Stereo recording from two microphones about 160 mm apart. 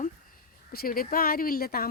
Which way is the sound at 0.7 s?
65° left (ahead or behind).